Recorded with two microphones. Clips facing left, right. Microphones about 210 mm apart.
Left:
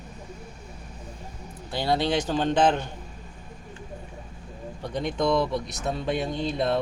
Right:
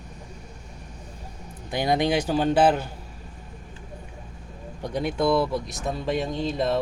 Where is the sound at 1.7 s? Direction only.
15° right (ahead or behind).